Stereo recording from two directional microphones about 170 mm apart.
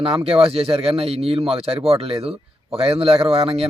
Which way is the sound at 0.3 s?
35° right (ahead or behind).